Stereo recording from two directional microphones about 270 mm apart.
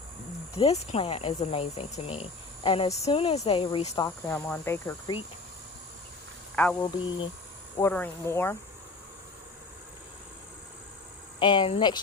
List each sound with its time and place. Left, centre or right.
0.5 s speech: left
6.6 s speech: centre
11.3 s speech: centre